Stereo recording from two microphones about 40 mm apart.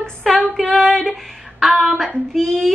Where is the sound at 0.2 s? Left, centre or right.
Centre.